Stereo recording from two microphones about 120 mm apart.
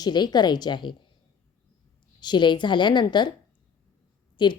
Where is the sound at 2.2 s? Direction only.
40° left (ahead or behind).